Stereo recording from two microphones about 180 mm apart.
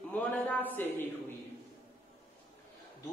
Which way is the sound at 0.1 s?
10° left (ahead or behind).